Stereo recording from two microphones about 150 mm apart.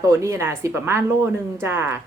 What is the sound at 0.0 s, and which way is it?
A woman's voice, 20° right (ahead or behind).